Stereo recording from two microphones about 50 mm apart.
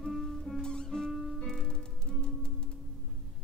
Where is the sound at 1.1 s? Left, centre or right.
Centre.